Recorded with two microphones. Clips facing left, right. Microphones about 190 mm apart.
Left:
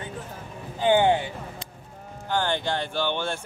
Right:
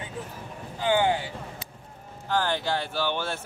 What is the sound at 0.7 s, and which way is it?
Speech, 25° left (ahead or behind).